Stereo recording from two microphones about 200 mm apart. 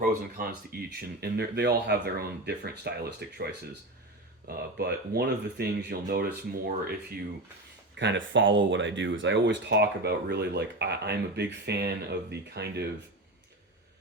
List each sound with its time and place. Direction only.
0.3 s speech: 50° right (ahead or behind)
7.9 s speech: 65° right (ahead or behind)